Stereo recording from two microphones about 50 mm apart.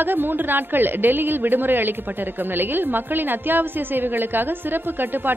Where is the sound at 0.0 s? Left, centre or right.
Right.